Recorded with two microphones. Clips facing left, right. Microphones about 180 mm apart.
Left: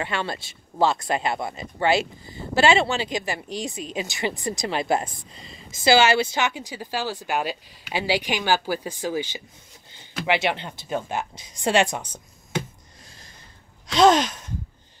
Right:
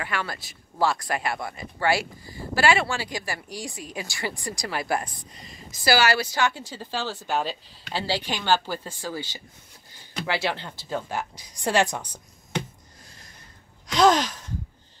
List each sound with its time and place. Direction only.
0.0 s speech: 25° left (ahead or behind)
13.9 s speech: 20° left (ahead or behind)